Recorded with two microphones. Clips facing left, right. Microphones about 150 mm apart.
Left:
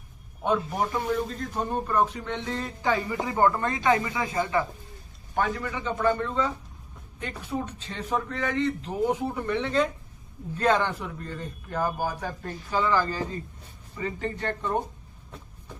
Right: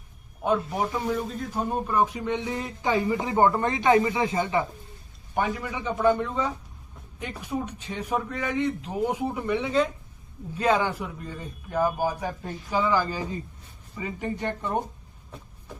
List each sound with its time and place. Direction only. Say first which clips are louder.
0.4 s a man's voice: right 1 dB; 5° right (ahead or behind)